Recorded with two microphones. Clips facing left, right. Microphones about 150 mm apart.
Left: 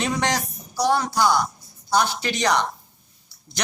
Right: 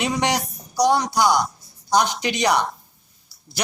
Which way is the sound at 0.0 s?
15° right (ahead or behind).